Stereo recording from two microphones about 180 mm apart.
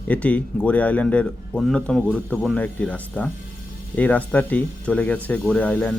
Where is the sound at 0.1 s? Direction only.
5° left (ahead or behind).